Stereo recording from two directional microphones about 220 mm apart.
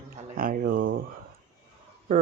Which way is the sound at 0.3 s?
40° right (ahead or behind).